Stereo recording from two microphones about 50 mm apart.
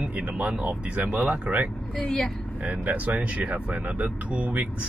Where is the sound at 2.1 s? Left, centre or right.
Centre.